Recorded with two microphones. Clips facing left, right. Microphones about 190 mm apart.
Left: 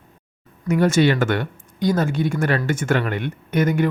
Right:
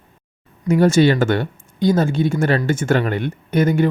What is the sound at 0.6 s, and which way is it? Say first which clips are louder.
Speech: right 3 dB; 30° right (ahead or behind).